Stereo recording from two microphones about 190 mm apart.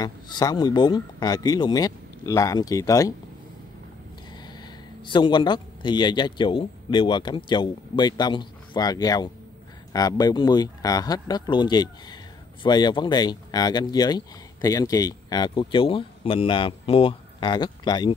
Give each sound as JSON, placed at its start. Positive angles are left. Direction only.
{"t": 0.0, "sound": "speech", "side_deg": 20}
{"t": 5.0, "sound": "speech", "side_deg": 25}